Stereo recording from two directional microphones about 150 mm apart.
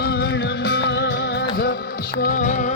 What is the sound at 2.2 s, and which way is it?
Music, 60° left (ahead or behind).